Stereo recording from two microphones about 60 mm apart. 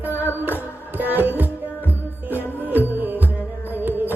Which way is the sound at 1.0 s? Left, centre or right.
Right.